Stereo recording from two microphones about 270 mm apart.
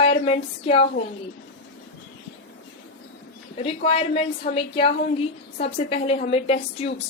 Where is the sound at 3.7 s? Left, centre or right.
Left.